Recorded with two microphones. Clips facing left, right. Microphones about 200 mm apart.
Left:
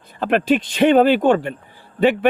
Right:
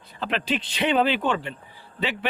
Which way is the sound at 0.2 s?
50° left (ahead or behind).